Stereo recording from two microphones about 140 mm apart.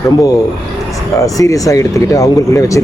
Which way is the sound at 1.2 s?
25° left (ahead or behind).